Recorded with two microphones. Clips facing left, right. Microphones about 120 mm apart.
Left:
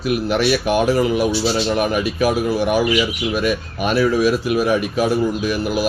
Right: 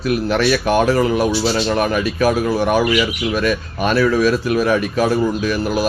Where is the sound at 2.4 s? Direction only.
50° right (ahead or behind).